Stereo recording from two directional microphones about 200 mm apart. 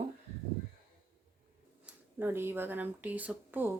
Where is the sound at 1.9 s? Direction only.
10° right (ahead or behind).